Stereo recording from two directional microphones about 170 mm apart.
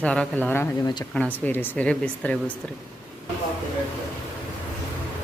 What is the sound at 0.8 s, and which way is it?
Speech, 25° left (ahead or behind).